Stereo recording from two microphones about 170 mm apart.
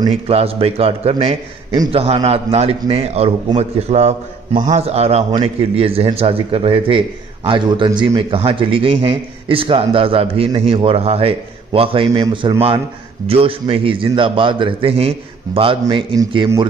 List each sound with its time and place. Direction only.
0.3 s a man's voice: 35° right (ahead or behind)